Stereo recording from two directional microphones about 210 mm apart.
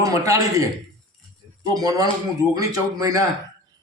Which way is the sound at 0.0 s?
15° right (ahead or behind).